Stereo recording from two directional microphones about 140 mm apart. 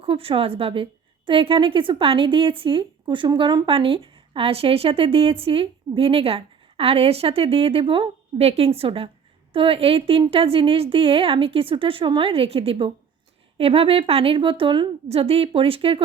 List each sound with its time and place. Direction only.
0.0 s a woman's voice: 40° right (ahead or behind)